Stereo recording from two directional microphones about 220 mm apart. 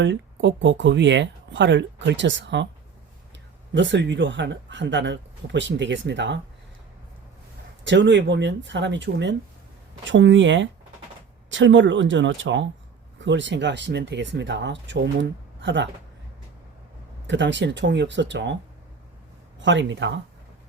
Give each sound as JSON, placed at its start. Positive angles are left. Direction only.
{"t": 0.0, "sound": "speech", "side_deg": -55}
{"t": 3.7, "sound": "speech", "side_deg": -55}
{"t": 7.9, "sound": "speech", "side_deg": -55}
{"t": 17.2, "sound": "speech", "side_deg": -55}
{"t": 19.5, "sound": "speech", "side_deg": -55}